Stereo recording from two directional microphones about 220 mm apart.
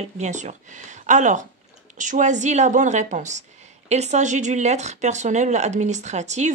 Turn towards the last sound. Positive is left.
turn(degrees=-30)  # may be behind; listen again after turning